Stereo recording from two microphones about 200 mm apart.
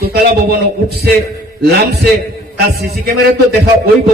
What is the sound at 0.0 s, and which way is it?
A man's voice, 50° right (ahead or behind).